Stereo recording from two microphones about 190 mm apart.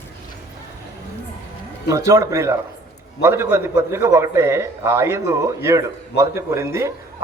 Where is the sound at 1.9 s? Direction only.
15° right (ahead or behind).